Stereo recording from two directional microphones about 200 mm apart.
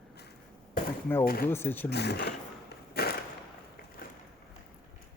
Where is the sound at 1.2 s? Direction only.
50° left (ahead or behind).